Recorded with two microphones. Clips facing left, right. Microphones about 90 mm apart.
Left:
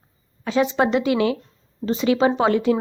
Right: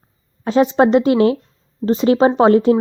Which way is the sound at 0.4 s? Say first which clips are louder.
Right 6 dB; 40° right (ahead or behind).